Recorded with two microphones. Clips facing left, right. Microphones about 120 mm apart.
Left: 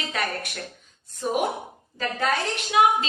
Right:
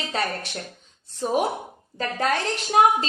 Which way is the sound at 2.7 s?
40° right (ahead or behind).